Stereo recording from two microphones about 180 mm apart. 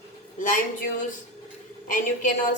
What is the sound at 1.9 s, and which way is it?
Speech, 45° left (ahead or behind).